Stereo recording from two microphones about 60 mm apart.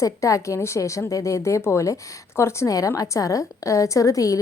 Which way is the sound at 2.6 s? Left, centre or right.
Left.